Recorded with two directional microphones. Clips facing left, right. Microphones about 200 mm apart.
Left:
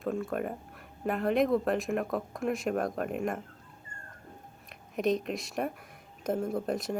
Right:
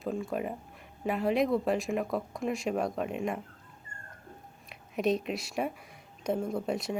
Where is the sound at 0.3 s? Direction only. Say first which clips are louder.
Even; centre (ahead or behind).